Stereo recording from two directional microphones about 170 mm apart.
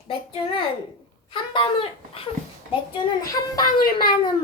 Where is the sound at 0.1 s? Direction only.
30° left (ahead or behind).